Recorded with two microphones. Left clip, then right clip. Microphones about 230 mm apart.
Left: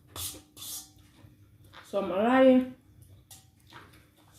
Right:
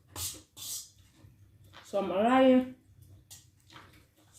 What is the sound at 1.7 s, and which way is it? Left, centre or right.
Speech, centre.